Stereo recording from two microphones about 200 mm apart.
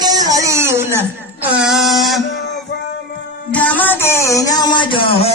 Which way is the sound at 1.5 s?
5° right (ahead or behind).